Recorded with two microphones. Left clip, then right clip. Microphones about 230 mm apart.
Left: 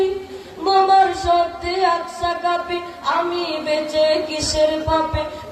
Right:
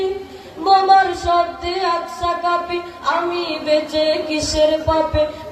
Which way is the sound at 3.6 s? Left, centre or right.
Right.